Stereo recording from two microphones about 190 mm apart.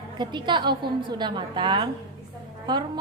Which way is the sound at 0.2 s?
25° right (ahead or behind).